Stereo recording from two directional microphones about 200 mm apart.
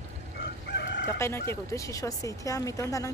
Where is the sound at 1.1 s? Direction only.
15° left (ahead or behind).